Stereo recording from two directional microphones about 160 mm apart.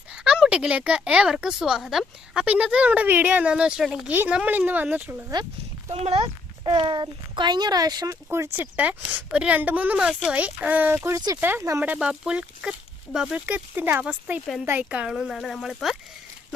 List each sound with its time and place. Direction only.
0.1 s a child's voice: 5° right (ahead or behind)
5.9 s a child's voice: 35° right (ahead or behind); by 14.4 s 10° right (ahead or behind)
14.4 s speech: centre (ahead or behind)
14.7 s speech: 10° right (ahead or behind)